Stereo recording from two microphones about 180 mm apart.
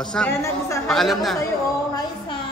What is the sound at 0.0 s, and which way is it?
Speech, 5° left (ahead or behind).